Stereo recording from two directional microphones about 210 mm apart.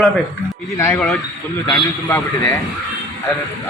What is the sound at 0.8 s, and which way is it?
A man's voice, 15° left (ahead or behind).